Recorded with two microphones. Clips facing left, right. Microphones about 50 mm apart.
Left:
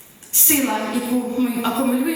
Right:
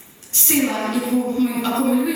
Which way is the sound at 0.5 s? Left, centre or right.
Centre.